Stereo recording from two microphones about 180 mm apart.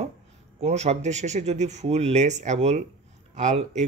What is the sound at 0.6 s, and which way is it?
Speech, 35° right (ahead or behind).